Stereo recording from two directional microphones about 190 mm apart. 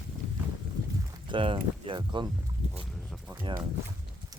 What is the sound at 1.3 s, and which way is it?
Speech, 25° right (ahead or behind).